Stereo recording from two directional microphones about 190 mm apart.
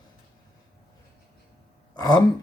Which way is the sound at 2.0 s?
20° left (ahead or behind).